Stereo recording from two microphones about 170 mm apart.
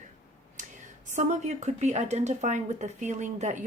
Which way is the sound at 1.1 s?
45° right (ahead or behind).